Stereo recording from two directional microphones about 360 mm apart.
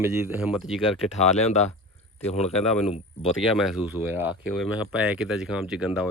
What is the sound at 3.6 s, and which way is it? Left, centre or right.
Speech, centre.